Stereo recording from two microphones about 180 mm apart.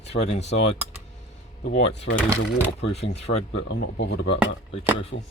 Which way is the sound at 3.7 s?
70° left (ahead or behind).